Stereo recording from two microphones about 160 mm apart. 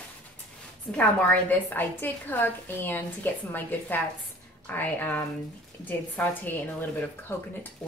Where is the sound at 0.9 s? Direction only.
10° left (ahead or behind).